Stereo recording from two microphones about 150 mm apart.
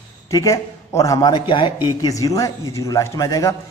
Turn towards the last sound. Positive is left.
turn(degrees=20)  # may be behind; listen again after turning